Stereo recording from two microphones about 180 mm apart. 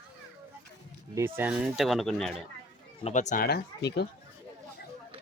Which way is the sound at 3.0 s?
40° left (ahead or behind).